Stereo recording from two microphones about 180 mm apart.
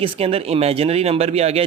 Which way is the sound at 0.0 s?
30° right (ahead or behind).